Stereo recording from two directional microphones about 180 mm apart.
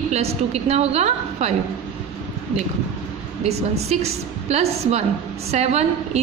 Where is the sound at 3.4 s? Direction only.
35° right (ahead or behind).